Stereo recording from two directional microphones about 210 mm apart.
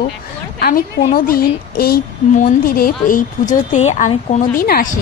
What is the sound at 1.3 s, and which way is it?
A woman's voice, 45° left (ahead or behind).